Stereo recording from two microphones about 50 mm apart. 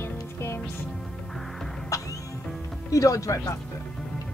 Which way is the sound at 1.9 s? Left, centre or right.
Left.